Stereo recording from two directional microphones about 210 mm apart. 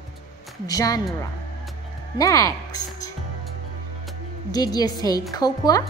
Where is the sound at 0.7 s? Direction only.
15° left (ahead or behind).